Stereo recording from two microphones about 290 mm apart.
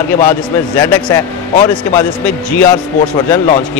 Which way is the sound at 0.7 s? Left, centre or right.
Centre.